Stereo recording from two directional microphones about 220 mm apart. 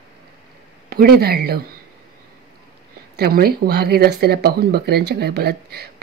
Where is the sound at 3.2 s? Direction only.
45° right (ahead or behind).